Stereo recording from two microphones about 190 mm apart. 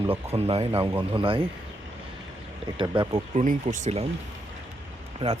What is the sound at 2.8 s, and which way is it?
Speech, 25° right (ahead or behind).